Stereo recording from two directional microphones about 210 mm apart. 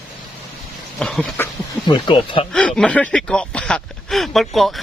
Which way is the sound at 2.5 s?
5° left (ahead or behind).